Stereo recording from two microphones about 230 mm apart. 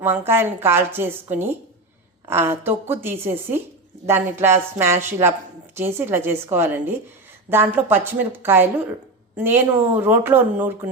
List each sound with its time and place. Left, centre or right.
0.0 s a woman's voice: centre